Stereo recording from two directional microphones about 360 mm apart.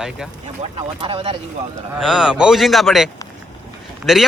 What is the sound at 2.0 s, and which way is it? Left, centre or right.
A man's voice, centre.